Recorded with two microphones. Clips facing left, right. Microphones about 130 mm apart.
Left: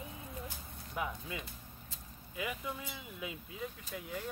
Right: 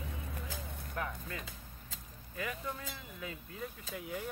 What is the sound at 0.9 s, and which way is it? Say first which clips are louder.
Chopping: left 2 dB; 10° left (ahead or behind).